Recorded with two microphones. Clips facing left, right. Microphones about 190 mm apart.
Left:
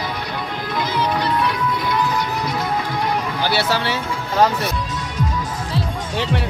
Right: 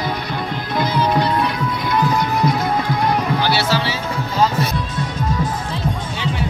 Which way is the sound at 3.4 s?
55° left (ahead or behind).